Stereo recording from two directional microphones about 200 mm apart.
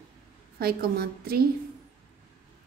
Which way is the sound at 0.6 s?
50° right (ahead or behind).